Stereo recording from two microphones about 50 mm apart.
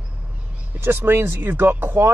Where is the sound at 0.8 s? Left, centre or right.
Right.